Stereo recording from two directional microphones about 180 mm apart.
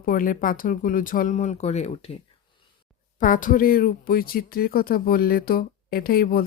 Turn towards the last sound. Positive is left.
turn(degrees=55)  # may be behind; listen again after turning